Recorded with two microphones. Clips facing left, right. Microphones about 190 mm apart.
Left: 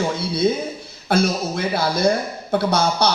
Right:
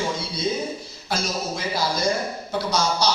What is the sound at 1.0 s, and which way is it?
Speech, 60° left (ahead or behind).